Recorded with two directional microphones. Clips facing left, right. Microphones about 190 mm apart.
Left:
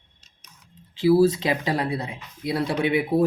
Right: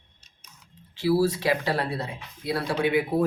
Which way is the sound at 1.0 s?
20° left (ahead or behind).